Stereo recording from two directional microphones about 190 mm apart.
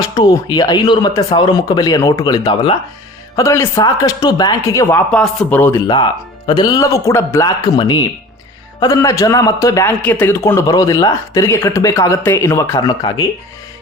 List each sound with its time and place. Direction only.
0.0 s a man's voice: 20° left (ahead or behind)
6.5 s a man's voice: 20° left (ahead or behind)